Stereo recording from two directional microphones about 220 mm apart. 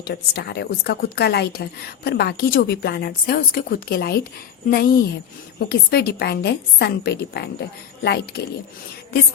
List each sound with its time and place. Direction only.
0.0 s a woman's voice: 50° left (ahead or behind)